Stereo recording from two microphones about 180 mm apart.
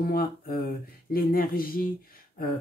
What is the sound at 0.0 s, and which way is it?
Speech, 55° left (ahead or behind).